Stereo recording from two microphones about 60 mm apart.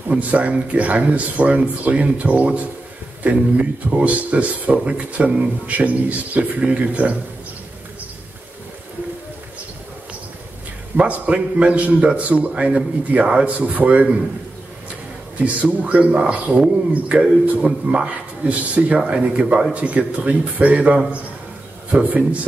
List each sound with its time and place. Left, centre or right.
0.1 s speech: right
11.0 s speech: right
15.3 s speech: right
16.9 s speech: right